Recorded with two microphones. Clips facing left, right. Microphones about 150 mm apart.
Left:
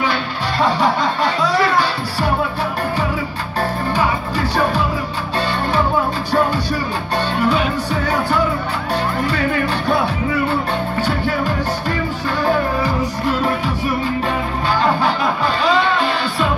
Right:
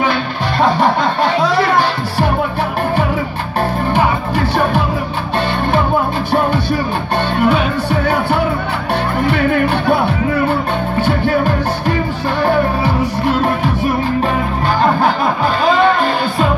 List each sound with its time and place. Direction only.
0.0 s music: 55° right (ahead or behind)
3.9 s music: 55° right (ahead or behind)
7.4 s music: 60° right (ahead or behind)
9.8 s music: 55° right (ahead or behind)
15.0 s music: 50° right (ahead or behind)